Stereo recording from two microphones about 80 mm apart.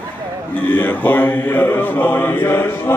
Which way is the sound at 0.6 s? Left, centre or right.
Left.